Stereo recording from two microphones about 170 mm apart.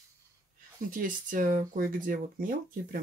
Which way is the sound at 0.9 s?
50° right (ahead or behind).